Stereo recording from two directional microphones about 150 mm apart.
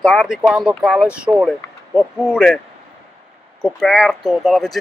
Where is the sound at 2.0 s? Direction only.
5° left (ahead or behind).